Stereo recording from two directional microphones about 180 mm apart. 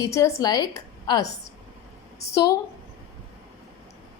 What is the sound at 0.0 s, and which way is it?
A woman's voice, 15° left (ahead or behind).